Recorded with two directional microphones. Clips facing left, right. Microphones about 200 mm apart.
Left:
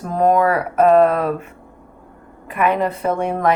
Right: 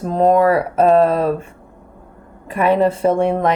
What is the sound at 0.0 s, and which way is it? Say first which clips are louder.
Speech: right 2 dB; 25° right (ahead or behind).